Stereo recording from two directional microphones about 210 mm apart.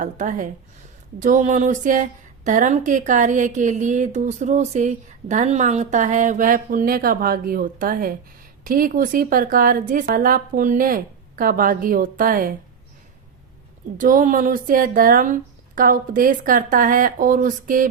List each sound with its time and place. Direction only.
0.0 s a woman's voice: 35° right (ahead or behind)
14.0 s a woman's voice: 40° right (ahead or behind)